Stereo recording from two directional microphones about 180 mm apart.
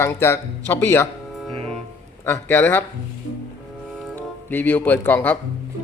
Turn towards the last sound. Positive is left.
turn(degrees=10)  # may be behind; listen again after turning